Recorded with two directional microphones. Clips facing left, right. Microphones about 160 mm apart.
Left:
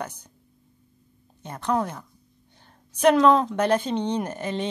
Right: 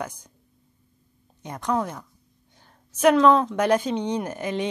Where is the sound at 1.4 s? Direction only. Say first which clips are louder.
Even; 15° right (ahead or behind).